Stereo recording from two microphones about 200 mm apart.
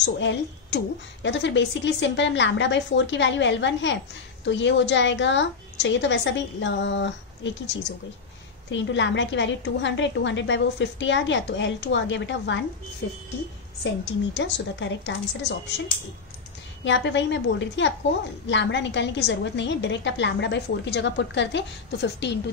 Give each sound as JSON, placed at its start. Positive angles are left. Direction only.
{"t": 0.0, "sound": "a woman's voice", "side_deg": 65}
{"t": 14.3, "sound": "a woman's voice", "side_deg": 65}
{"t": 16.8, "sound": "a woman's voice", "side_deg": 65}